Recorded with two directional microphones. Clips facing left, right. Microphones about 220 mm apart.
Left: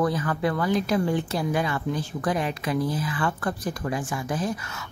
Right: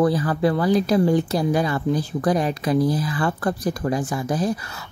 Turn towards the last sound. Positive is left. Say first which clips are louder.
# right 5 dB
turn(degrees=-35)  # may be behind; listen again after turning